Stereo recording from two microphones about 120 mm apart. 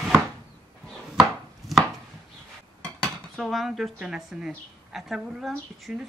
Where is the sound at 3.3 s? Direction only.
Centre (ahead or behind).